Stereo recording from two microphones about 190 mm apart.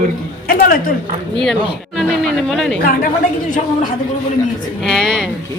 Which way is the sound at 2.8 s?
50° left (ahead or behind).